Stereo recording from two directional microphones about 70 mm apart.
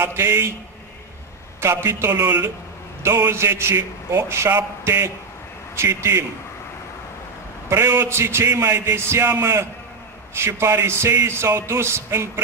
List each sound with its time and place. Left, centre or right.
0.0 s a man's voice: right
1.6 s a man's voice: right
7.7 s a man's voice: right